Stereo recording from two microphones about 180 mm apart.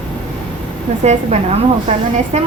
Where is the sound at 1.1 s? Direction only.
40° right (ahead or behind).